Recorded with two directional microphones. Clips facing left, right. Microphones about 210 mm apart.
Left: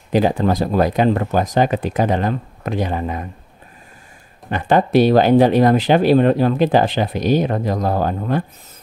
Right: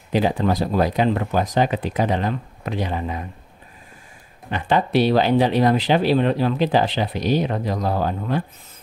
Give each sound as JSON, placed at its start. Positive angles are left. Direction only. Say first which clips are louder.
{"t": 0.1, "sound": "speech", "louder": "left 3 dB", "side_deg": 45}
{"t": 4.5, "sound": "speech", "louder": "left 5 dB", "side_deg": 50}